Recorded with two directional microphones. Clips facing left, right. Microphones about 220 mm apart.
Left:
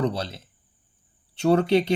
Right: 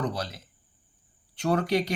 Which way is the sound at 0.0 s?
25° left (ahead or behind).